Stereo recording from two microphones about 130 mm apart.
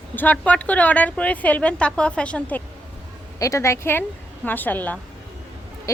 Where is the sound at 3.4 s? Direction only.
25° left (ahead or behind).